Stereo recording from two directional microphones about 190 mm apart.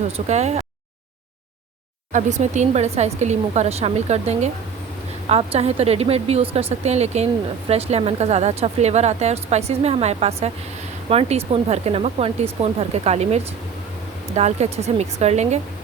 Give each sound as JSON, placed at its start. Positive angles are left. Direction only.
{"t": 0.3, "sound": "speech", "side_deg": -35}
{"t": 2.1, "sound": "speech", "side_deg": -40}